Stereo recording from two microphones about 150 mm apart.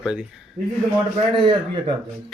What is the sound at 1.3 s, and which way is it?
Speech, 35° right (ahead or behind).